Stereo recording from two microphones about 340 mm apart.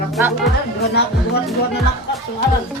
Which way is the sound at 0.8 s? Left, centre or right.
Left.